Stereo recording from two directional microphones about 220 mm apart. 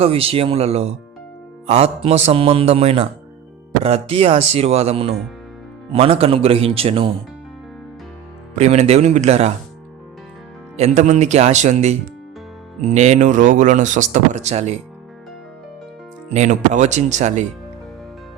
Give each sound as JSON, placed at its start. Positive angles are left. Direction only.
{"t": 0.0, "sound": "speech", "side_deg": -25}
{"t": 8.5, "sound": "speech", "side_deg": -30}
{"t": 10.8, "sound": "speech", "side_deg": -30}
{"t": 16.3, "sound": "speech", "side_deg": -30}